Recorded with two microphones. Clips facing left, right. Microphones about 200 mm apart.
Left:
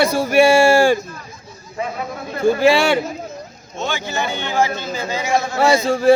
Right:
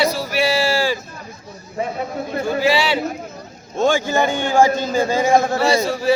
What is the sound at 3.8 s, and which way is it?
A man's voice, 50° right (ahead or behind).